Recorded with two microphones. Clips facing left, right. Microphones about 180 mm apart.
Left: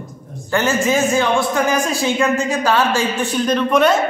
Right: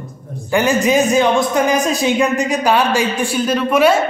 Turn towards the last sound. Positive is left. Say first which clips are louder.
# right 1 dB
turn(degrees=-10)  # may be behind; listen again after turning